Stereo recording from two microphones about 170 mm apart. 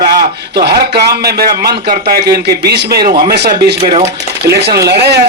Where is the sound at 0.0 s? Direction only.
65° right (ahead or behind).